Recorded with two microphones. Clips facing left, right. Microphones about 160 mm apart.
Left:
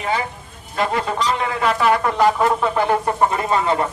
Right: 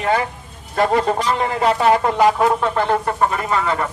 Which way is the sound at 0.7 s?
45° right (ahead or behind).